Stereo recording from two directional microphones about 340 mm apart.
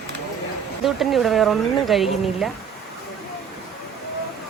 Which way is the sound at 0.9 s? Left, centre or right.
Centre.